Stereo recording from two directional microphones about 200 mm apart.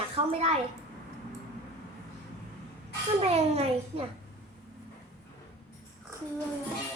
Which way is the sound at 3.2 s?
30° right (ahead or behind).